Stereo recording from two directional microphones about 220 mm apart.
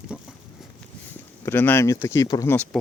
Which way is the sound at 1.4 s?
10° left (ahead or behind).